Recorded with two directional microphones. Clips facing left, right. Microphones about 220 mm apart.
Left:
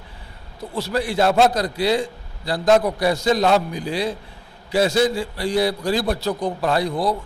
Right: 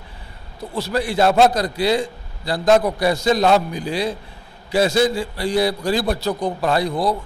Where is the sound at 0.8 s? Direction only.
15° right (ahead or behind).